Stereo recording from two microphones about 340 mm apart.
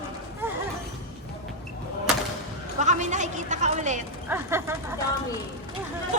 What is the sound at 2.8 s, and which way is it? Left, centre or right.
A woman's voice, right.